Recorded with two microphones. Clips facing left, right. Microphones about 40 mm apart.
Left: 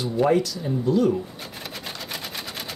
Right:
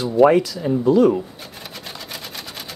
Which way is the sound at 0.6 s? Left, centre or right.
Right.